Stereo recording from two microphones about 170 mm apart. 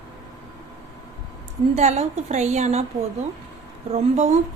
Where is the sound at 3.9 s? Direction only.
40° right (ahead or behind).